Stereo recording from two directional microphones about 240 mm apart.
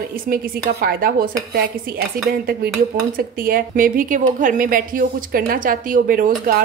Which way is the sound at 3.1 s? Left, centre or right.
Right.